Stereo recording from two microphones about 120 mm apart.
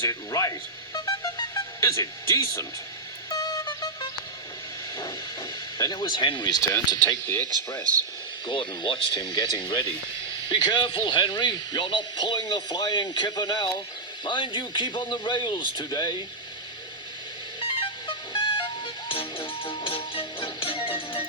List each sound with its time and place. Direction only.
0.0 s speech: 25° left (ahead or behind)
0.9 s music: 30° left (ahead or behind)
4.9 s a man's voice: 35° left (ahead or behind)
8.4 s a man's voice: 45° left (ahead or behind)
17.6 s music: 50° left (ahead or behind)